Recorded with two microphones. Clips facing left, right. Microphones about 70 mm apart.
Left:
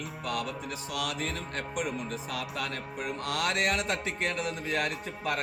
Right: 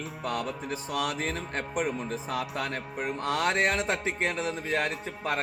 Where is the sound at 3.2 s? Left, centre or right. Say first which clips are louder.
Right 4 dB; right.